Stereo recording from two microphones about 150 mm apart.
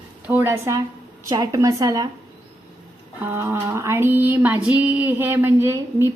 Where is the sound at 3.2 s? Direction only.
15° right (ahead or behind).